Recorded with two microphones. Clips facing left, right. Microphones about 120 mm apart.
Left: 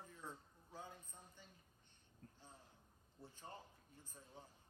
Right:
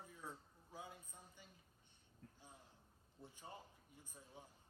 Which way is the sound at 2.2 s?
40° left (ahead or behind).